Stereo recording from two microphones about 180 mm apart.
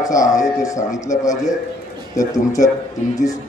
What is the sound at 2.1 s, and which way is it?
Speech, 20° left (ahead or behind).